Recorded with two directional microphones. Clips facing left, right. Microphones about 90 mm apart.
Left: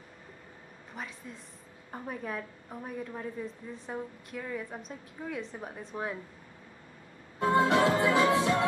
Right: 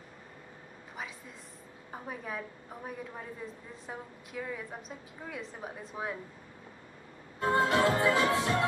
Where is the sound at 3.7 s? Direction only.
Centre (ahead or behind).